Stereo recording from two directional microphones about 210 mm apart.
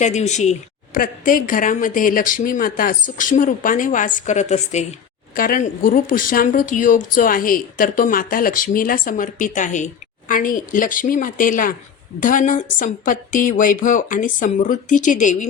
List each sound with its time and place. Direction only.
0.0 s speech: 35° left (ahead or behind)